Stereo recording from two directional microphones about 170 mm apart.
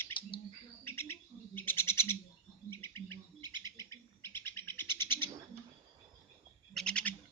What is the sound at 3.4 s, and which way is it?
Bird, 25° right (ahead or behind).